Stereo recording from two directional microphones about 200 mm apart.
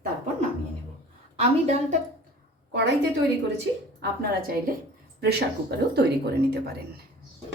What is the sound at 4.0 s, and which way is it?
A woman's voice, 50° right (ahead or behind).